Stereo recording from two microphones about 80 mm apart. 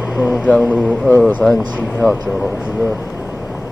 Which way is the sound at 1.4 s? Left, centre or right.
Centre.